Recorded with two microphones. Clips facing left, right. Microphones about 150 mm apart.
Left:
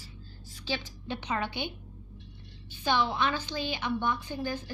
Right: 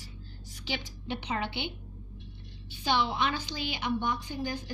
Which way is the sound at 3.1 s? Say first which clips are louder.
Left 1 dB; 15° right (ahead or behind).